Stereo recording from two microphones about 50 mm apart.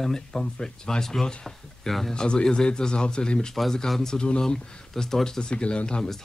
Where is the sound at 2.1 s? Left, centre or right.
Centre.